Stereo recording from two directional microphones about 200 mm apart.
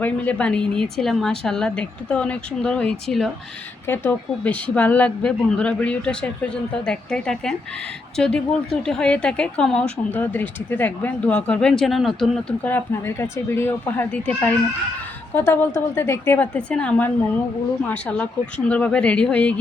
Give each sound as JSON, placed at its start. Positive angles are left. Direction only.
{"t": 0.0, "sound": "speech", "side_deg": 5}